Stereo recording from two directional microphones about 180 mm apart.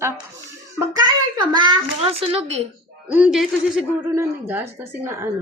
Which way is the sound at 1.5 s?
30° right (ahead or behind).